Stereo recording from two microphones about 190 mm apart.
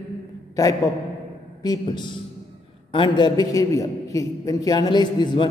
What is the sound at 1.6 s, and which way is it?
A man's voice, 20° left (ahead or behind).